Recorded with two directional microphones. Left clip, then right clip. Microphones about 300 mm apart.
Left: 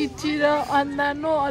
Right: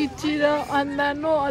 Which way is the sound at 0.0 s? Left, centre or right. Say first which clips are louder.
Even; centre.